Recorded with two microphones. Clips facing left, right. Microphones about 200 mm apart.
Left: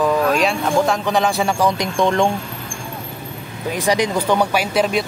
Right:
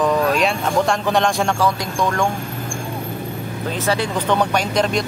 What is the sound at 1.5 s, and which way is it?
Speech, 20° left (ahead or behind).